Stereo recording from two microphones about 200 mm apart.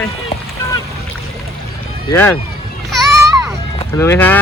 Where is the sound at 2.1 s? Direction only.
10° left (ahead or behind).